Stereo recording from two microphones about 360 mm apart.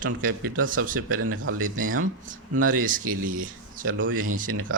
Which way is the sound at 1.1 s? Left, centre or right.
Right.